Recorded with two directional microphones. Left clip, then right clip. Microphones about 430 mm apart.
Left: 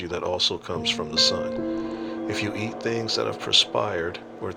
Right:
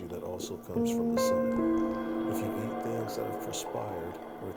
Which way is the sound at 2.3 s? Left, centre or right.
Right.